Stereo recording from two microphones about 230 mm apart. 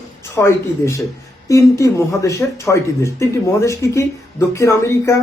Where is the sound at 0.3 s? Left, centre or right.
Centre.